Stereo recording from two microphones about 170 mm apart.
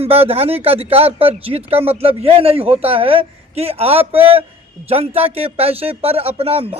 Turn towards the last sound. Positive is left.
turn(degrees=-35)  # may be behind; listen again after turning